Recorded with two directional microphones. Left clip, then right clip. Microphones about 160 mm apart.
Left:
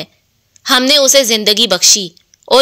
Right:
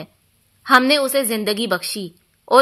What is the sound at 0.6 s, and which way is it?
Speech, 25° left (ahead or behind).